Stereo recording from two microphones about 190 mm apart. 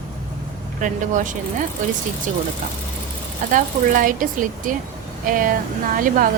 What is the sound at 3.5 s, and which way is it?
Speech, 45° right (ahead or behind).